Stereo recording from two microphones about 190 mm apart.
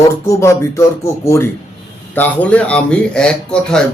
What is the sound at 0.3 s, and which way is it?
Speech, 15° left (ahead or behind).